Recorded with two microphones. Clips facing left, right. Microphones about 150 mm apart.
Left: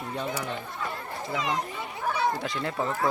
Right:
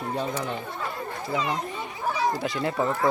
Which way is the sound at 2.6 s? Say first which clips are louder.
Right 4 dB; 10° right (ahead or behind).